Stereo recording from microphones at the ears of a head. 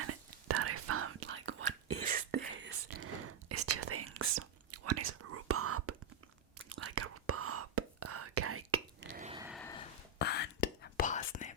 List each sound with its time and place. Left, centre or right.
0.0 s whispering: right
9.7 s whispering: left